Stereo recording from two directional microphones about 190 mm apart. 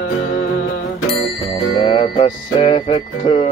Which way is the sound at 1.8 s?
30° left (ahead or behind).